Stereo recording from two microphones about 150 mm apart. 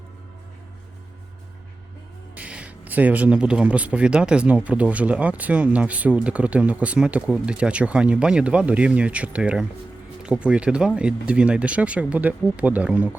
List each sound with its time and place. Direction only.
2.3 s speech: 10° right (ahead or behind)